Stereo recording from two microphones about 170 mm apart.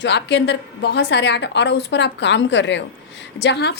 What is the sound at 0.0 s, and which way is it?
A woman's voice, 90° left.